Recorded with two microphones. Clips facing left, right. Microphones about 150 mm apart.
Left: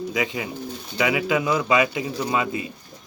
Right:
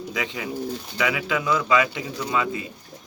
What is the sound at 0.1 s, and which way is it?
Speech, 10° left (ahead or behind).